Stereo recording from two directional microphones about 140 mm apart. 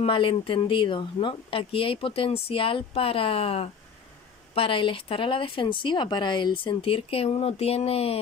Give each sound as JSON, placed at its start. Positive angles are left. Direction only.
{"t": 0.0, "sound": "speech", "side_deg": 40}